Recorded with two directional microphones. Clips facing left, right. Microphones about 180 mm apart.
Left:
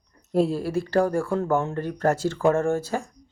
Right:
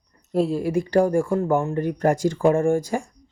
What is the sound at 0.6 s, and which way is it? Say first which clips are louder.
Speech: right 3 dB; 15° right (ahead or behind).